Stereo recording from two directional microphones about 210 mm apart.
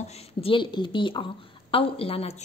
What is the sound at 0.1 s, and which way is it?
A woman's voice, 25° left (ahead or behind).